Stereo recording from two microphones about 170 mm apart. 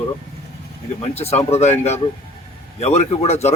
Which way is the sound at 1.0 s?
35° left (ahead or behind).